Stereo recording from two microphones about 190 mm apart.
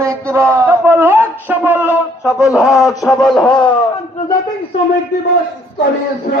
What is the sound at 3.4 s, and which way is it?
Speech, 25° left (ahead or behind).